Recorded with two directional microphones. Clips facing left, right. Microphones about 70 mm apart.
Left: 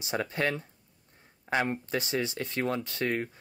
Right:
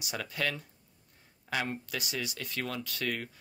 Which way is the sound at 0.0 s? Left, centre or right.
Left.